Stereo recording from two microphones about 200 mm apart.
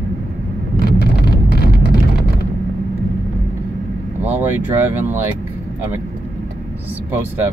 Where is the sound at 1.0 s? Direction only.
50° left (ahead or behind).